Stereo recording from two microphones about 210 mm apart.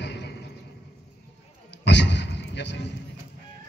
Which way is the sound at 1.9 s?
55° left (ahead or behind).